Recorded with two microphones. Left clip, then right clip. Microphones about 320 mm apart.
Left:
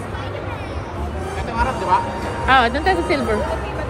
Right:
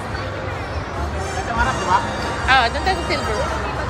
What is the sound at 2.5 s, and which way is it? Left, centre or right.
Speech, left.